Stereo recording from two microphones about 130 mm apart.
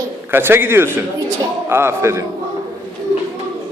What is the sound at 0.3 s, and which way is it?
A man's voice, 15° right (ahead or behind).